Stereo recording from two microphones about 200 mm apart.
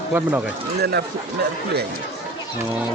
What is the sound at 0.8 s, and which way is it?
Speech, 55° right (ahead or behind).